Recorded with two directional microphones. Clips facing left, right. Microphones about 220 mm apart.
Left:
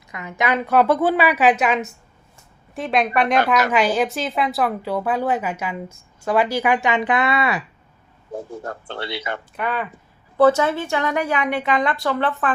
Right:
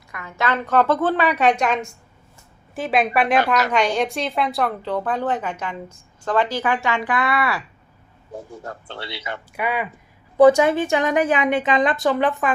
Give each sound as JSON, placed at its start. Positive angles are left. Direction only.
{"t": 0.1, "sound": "a woman's voice", "side_deg": 20}
{"t": 8.6, "sound": "speech", "side_deg": 50}
{"t": 9.6, "sound": "a woman's voice", "side_deg": -10}